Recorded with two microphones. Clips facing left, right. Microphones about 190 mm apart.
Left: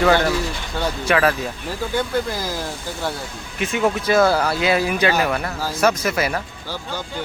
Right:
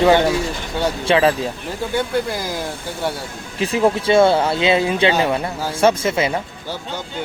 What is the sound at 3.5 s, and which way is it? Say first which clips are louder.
Speech: right 3 dB; 30° right (ahead or behind).